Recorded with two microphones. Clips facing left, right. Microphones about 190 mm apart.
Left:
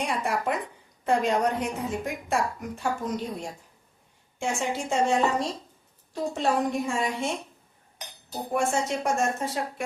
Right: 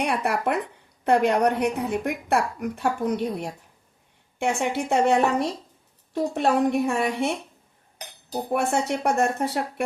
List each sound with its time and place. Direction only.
0.0 s a woman's voice: 65° right (ahead or behind)
8.5 s a woman's voice: 60° right (ahead or behind)